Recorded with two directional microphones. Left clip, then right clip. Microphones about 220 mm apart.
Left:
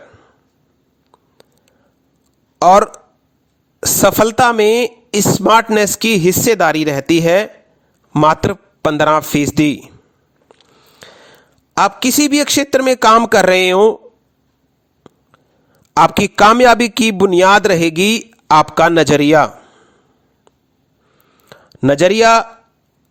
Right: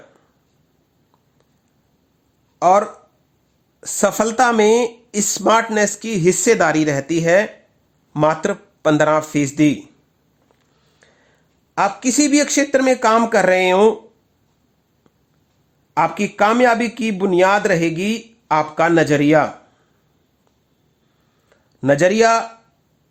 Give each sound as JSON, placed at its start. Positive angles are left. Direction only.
{"t": 2.6, "sound": "speech", "side_deg": 40}
{"t": 15.1, "sound": "a sound", "side_deg": 35}
{"t": 16.0, "sound": "speech", "side_deg": 40}
{"t": 21.8, "sound": "speech", "side_deg": 35}